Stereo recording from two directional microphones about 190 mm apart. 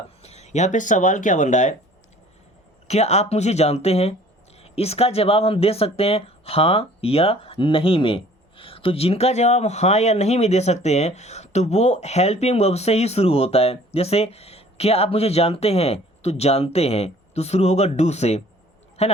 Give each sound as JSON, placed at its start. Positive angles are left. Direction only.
{"t": 0.2, "sound": "speech", "side_deg": 35}
{"t": 2.8, "sound": "a woman's voice", "side_deg": 35}